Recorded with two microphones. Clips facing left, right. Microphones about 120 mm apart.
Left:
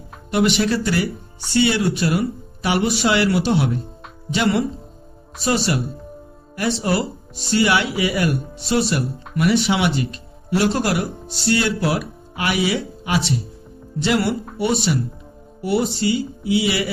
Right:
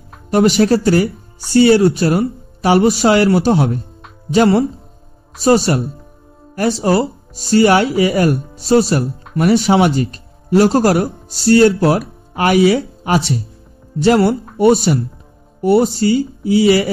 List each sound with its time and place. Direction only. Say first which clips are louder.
0.3 s speech: right 7 dB; 40° right (ahead or behind)
6.8 s speech: right 7 dB; 35° right (ahead or behind)